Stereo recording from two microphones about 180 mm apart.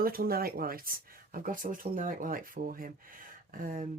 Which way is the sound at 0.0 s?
55° right (ahead or behind).